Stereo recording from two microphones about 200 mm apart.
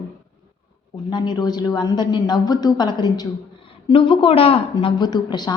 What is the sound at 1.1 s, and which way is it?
A woman's voice, 20° left (ahead or behind).